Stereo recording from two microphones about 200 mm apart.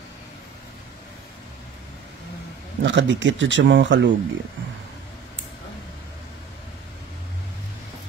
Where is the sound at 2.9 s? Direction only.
65° right (ahead or behind).